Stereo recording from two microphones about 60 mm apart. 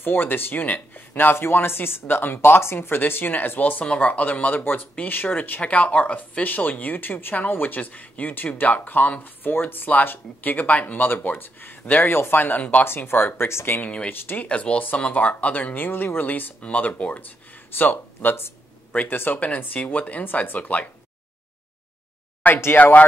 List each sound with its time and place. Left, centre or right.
0.0 s speech: left
3.8 s speech: centre
12.8 s speech: left
13.8 s speech: left
22.4 s speech: left